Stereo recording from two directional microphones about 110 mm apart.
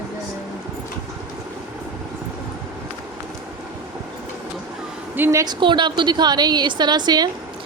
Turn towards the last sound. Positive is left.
turn(degrees=-40)  # may be behind; listen again after turning